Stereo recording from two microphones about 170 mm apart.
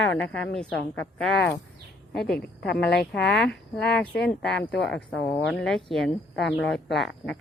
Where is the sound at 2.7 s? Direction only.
70° left (ahead or behind).